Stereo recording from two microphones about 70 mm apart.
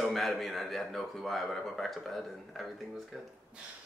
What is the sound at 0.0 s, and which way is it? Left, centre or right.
A man's voice, centre.